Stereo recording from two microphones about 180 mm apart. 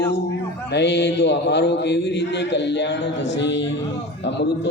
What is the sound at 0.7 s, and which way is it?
Mantra, 70° left (ahead or behind).